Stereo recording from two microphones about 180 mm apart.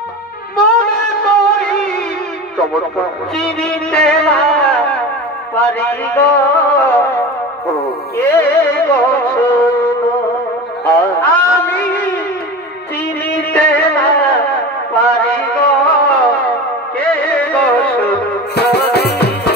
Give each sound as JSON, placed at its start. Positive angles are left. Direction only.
{"t": 1.0, "sound": "music", "side_deg": 5}
{"t": 3.3, "sound": "music", "side_deg": 5}
{"t": 5.6, "sound": "speech", "side_deg": 10}
{"t": 8.4, "sound": "music", "side_deg": 10}
{"t": 11.2, "sound": "a sound", "side_deg": 10}
{"t": 13.5, "sound": "music", "side_deg": 10}
{"t": 18.6, "sound": "music", "side_deg": 65}